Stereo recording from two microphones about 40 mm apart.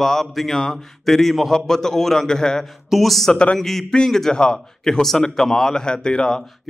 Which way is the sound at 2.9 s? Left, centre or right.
Centre.